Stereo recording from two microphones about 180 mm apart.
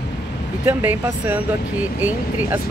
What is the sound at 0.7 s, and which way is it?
Speech, 10° right (ahead or behind).